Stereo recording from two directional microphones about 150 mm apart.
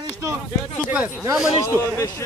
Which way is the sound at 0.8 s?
10° right (ahead or behind).